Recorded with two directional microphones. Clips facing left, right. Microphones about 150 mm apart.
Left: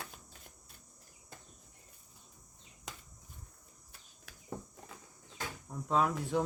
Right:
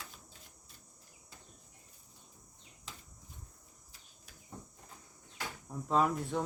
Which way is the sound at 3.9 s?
65° left (ahead or behind).